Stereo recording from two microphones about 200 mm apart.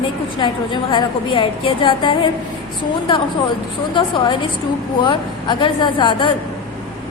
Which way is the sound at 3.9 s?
25° left (ahead or behind).